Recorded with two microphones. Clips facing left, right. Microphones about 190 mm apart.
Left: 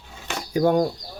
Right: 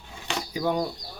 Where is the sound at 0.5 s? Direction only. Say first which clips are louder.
Left 8 dB; 50° left (ahead or behind).